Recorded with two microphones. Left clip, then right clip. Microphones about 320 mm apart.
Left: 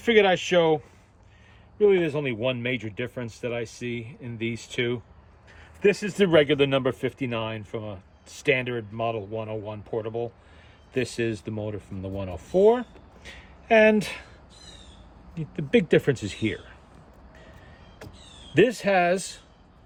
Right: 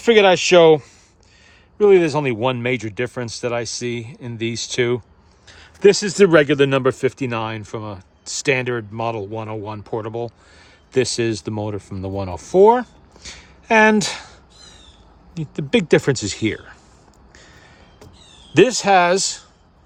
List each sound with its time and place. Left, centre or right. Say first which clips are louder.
0.0 s speech: right 7 dB; centre
0.3 s speech: right 10 dB; right
1.8 s speech: right 8 dB; right
15.4 s speech: right 4 dB; right
18.6 s speech: right 7 dB; right